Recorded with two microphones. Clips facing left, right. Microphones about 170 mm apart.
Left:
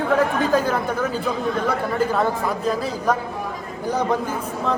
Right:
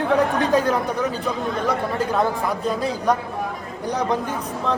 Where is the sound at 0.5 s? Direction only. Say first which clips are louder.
Right 1 dB; centre (ahead or behind).